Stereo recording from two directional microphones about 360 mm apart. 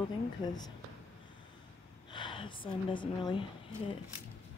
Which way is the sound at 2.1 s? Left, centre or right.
Centre.